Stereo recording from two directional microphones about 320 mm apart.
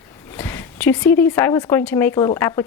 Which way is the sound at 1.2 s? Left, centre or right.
Centre.